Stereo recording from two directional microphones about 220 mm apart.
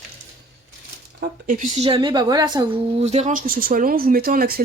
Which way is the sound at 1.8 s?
20° right (ahead or behind).